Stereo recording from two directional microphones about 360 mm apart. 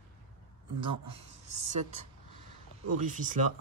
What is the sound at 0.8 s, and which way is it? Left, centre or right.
Speech, centre.